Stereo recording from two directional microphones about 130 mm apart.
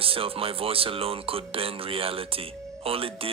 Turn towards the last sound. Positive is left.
turn(degrees=-45)  # may be behind; listen again after turning